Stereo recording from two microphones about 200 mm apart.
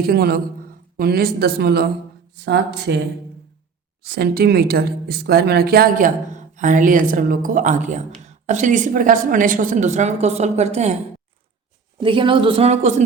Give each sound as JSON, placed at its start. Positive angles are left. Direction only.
{"t": 0.0, "sound": "speech", "side_deg": -50}
{"t": 4.0, "sound": "a woman's voice", "side_deg": -50}
{"t": 11.9, "sound": "a woman's voice", "side_deg": -25}